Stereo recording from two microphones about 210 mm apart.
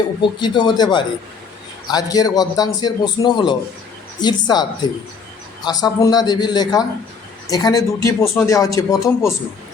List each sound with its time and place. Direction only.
0.2 s a man's voice: 20° left (ahead or behind)
5.6 s a man's voice: 20° left (ahead or behind)